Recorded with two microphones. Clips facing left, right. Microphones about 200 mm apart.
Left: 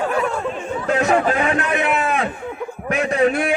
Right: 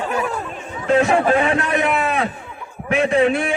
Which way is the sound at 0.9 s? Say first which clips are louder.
Right 3 dB; 30° right (ahead or behind).